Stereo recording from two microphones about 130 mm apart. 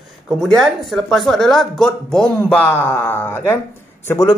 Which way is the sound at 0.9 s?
Centre (ahead or behind).